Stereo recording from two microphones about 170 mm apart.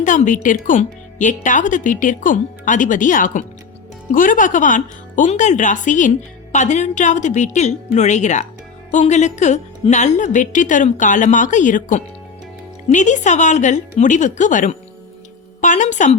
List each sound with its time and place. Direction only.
0.0 s speech: 50° left (ahead or behind)